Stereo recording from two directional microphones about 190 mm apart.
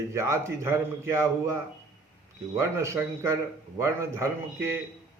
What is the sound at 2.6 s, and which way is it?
A man's voice, 15° right (ahead or behind).